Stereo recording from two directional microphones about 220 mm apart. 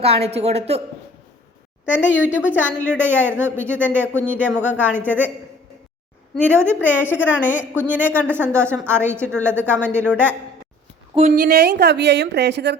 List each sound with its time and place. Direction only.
0.0 s speech: 25° right (ahead or behind)
2.3 s speech: 5° right (ahead or behind)
6.5 s speech: 10° right (ahead or behind)
11.2 s a woman's voice: 40° right (ahead or behind)